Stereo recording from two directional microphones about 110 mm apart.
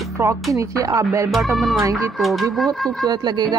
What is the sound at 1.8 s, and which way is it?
Speech, 30° right (ahead or behind).